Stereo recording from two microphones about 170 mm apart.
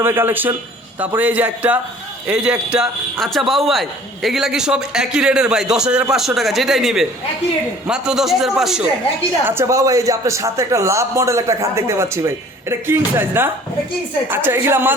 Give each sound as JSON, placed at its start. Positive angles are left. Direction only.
{"t": 0.0, "sound": "a man's voice", "side_deg": -15}
{"t": 9.4, "sound": "a man's voice", "side_deg": -15}